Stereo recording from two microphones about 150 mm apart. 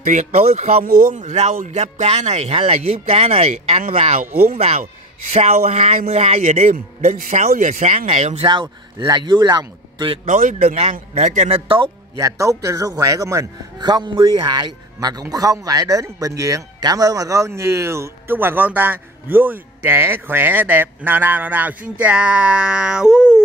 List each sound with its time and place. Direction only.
0.0 s a man's voice: 55° right (ahead or behind)
8.5 s speech: 30° right (ahead or behind)
10.2 s a man's voice: 55° right (ahead or behind); by 11.9 s 35° right (ahead or behind)
12.2 s a man's voice: 20° right (ahead or behind); by 23.4 s 5° right (ahead or behind)